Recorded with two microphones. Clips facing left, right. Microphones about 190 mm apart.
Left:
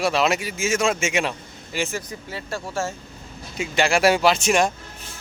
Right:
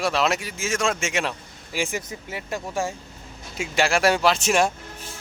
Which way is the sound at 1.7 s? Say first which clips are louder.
Even; 10° right (ahead or behind).